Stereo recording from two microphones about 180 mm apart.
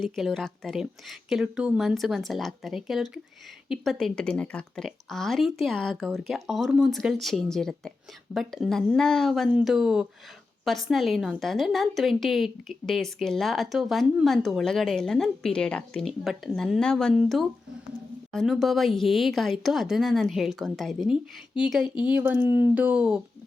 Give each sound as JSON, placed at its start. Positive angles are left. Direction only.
{"t": 0.0, "sound": "a woman's voice", "side_deg": 0}
{"t": 22.1, "sound": "speech", "side_deg": -10}